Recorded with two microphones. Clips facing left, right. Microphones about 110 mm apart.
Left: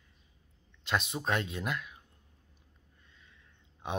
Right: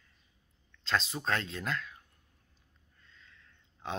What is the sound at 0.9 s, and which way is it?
Speech, 15° left (ahead or behind).